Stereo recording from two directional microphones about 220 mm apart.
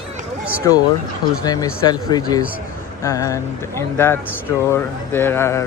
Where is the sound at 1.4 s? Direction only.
15° left (ahead or behind).